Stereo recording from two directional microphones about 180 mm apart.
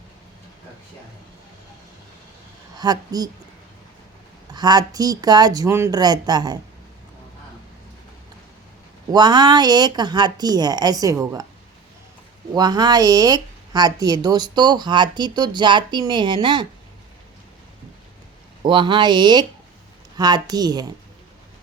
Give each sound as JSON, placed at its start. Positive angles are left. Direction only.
{"t": 2.7, "sound": "speech", "side_deg": -20}
{"t": 4.5, "sound": "speech", "side_deg": -25}
{"t": 9.1, "sound": "speech", "side_deg": -25}
{"t": 12.5, "sound": "speech", "side_deg": -20}
{"t": 18.6, "sound": "speech", "side_deg": -25}